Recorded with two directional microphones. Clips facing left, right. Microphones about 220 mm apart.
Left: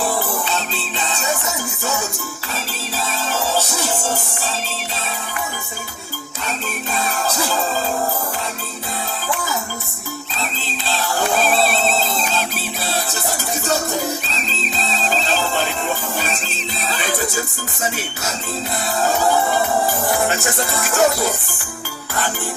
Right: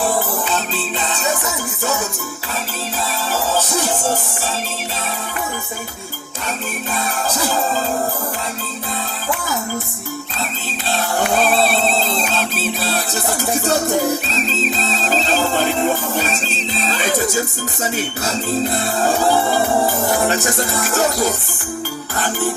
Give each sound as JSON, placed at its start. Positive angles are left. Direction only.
{"t": 11.6, "sound": "a sound", "side_deg": -35}
{"t": 14.3, "sound": "music", "side_deg": -40}
{"t": 19.0, "sound": "music", "side_deg": -30}